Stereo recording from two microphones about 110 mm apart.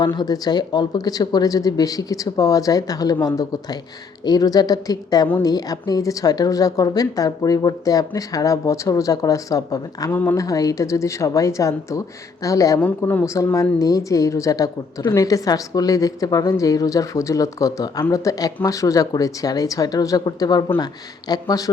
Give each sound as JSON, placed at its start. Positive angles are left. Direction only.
{"t": 0.2, "sound": "speech", "side_deg": 40}
{"t": 10.1, "sound": "speech", "side_deg": 20}
{"t": 10.3, "sound": "speech", "side_deg": 30}